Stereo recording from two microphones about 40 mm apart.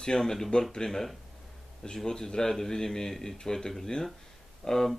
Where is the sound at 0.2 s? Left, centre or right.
Centre.